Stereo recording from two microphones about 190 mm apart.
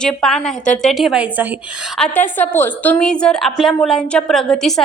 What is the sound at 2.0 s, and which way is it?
A woman's voice, 10° left (ahead or behind).